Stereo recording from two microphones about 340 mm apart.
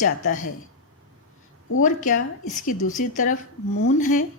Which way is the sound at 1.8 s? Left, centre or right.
Left.